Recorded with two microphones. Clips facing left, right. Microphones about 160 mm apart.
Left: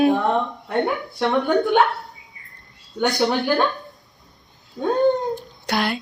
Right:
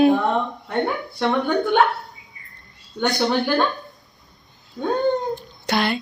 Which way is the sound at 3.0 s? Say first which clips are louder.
Even; centre (ahead or behind).